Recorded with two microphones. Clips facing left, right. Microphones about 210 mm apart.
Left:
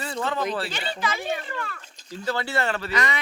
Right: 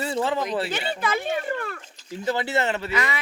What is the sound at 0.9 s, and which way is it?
Speech, 55° right (ahead or behind).